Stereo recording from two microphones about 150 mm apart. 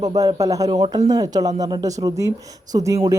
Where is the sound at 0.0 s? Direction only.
30° right (ahead or behind).